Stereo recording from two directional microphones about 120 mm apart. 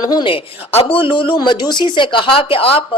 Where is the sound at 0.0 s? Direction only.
35° left (ahead or behind).